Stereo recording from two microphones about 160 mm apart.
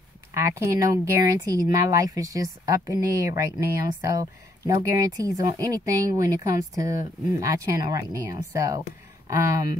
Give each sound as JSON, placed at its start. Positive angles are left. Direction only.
{"t": 0.3, "sound": "speech", "side_deg": -20}